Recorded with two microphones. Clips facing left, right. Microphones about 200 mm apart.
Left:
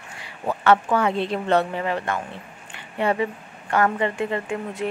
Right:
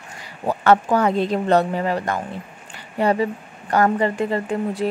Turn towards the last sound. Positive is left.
turn(degrees=-35)  # may be behind; listen again after turning